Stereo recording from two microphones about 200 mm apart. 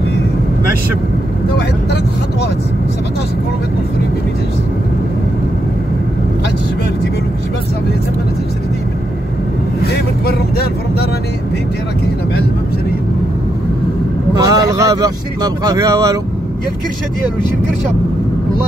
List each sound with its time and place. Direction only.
9.8 s speech: 50° left (ahead or behind)
14.3 s speech: 15° right (ahead or behind)